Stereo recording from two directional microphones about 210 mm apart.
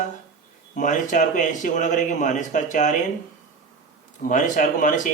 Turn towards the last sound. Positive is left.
turn(degrees=40)  # may be behind; listen again after turning